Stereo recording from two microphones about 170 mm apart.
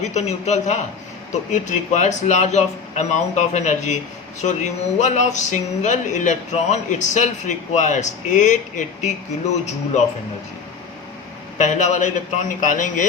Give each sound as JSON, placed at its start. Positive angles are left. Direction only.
{"t": 0.0, "sound": "a man's voice", "side_deg": 40}
{"t": 11.5, "sound": "speech", "side_deg": 45}